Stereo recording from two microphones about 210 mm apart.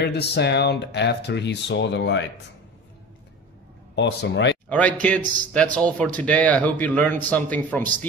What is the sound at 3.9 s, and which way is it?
Speech, 55° left (ahead or behind).